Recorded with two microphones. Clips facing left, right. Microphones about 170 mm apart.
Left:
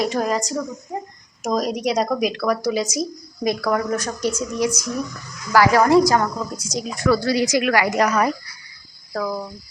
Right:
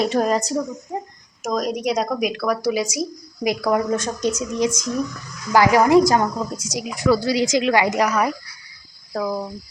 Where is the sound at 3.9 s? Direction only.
25° right (ahead or behind).